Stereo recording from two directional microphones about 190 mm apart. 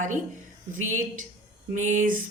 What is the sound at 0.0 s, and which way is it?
A woman's voice, 40° right (ahead or behind).